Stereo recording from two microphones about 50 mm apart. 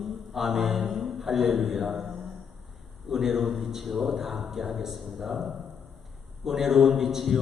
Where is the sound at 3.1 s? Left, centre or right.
Centre.